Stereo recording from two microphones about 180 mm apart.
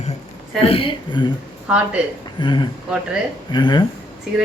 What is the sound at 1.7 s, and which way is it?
Speech, 5° right (ahead or behind).